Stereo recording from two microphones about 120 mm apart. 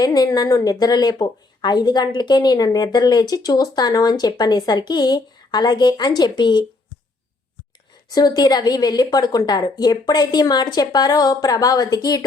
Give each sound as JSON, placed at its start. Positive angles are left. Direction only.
{"t": 0.0, "sound": "a woman's voice", "side_deg": 30}
{"t": 8.1, "sound": "a woman's voice", "side_deg": 35}